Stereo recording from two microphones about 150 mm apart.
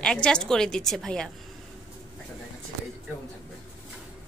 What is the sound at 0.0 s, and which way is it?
A woman's voice, 5° left (ahead or behind).